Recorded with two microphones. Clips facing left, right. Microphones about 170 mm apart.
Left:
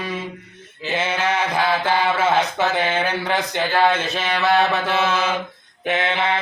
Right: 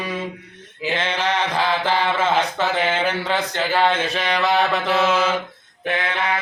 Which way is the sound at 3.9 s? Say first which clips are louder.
Right 1 dB; 10° right (ahead or behind).